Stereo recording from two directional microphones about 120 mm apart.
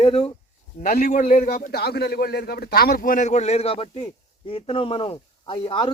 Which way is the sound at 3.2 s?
75° left (ahead or behind).